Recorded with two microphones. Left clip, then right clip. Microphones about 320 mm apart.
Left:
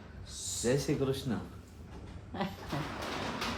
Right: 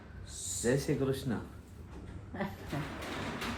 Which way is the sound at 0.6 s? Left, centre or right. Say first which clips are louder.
Even; centre.